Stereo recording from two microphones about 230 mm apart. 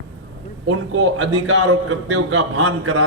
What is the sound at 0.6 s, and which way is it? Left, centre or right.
A man's voice, right.